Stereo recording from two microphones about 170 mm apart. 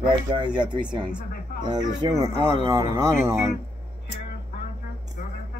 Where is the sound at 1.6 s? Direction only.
25° right (ahead or behind).